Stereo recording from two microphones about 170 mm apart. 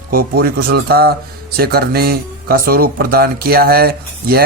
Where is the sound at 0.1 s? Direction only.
60° right (ahead or behind).